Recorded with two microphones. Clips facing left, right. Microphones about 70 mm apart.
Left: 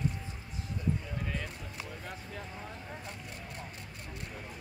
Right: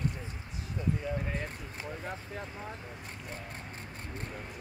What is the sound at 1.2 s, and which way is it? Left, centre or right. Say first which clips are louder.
Speech: right 2 dB; right.